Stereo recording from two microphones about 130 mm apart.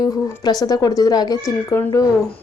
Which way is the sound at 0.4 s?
30° left (ahead or behind).